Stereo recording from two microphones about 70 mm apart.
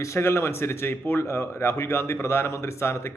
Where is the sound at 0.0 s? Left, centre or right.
Left.